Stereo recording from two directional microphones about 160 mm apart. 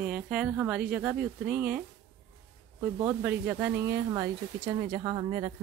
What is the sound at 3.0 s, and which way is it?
Speech, 15° right (ahead or behind).